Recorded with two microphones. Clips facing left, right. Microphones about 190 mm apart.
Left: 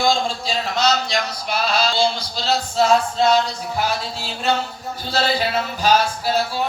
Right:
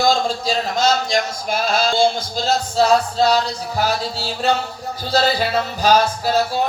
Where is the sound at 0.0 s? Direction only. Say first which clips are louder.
Right 2 dB; 45° right (ahead or behind).